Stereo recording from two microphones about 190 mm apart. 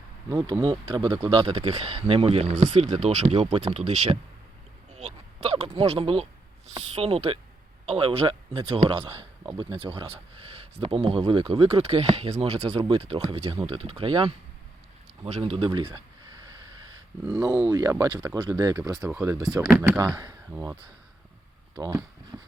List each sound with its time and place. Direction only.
0.4 s a man's voice: 25° right (ahead or behind)
17.7 s speech: 15° right (ahead or behind)
22.3 s speech: 10° right (ahead or behind)